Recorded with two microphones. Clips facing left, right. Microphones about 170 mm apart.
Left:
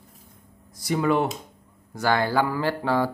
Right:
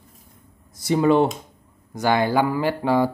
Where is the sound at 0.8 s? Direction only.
25° right (ahead or behind).